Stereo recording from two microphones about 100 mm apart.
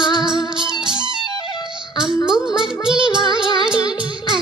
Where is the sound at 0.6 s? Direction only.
50° right (ahead or behind).